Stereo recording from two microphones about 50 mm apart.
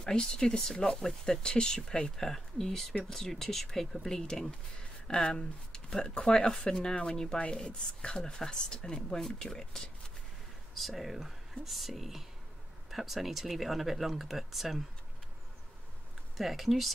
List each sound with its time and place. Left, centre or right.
0.0 s speech: centre
16.3 s speech: centre